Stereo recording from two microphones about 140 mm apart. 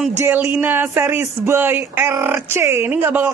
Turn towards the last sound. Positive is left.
turn(degrees=-15)  # may be behind; listen again after turning